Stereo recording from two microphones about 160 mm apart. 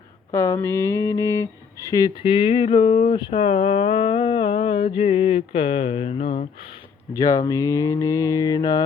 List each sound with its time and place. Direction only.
0.3 s speech: 20° left (ahead or behind); by 6.5 s 40° left (ahead or behind)
7.2 s mantra: 25° left (ahead or behind)